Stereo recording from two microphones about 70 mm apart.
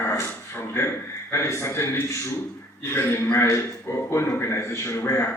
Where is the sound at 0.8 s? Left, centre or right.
Left.